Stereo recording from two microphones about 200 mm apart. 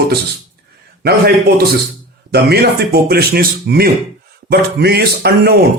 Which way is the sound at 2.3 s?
55° right (ahead or behind).